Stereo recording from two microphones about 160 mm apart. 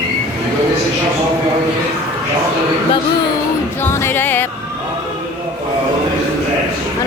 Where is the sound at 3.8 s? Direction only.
15° left (ahead or behind).